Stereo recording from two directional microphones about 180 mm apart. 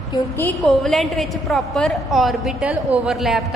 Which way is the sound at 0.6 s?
Centre (ahead or behind).